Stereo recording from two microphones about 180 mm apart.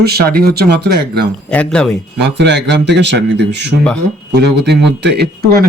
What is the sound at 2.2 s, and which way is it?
A man's voice, 70° right (ahead or behind).